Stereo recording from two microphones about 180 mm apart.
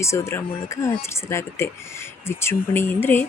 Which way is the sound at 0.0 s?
15° left (ahead or behind).